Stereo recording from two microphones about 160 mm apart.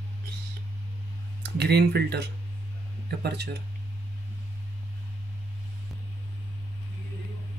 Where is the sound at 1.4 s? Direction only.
90° right.